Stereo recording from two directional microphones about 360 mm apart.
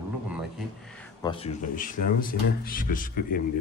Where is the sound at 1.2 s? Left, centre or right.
Centre.